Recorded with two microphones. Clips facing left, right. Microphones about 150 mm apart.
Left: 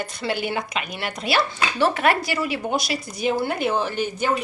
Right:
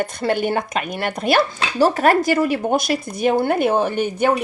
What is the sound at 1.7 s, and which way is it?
Speech, 40° right (ahead or behind).